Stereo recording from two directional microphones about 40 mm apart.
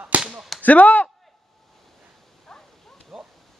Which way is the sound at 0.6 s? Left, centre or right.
Left.